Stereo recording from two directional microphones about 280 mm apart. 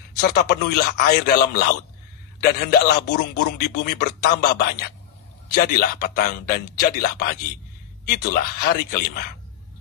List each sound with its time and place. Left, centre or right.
0.2 s a man's voice: left